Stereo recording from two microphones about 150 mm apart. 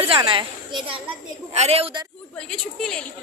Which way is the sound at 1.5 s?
45° right (ahead or behind).